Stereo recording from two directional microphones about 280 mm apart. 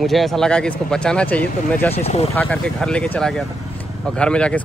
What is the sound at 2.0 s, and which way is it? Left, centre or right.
Speech, left.